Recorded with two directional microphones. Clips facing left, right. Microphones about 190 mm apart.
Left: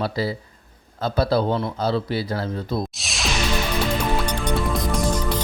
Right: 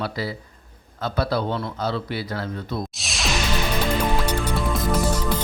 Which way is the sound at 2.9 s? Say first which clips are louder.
Even; centre (ahead or behind).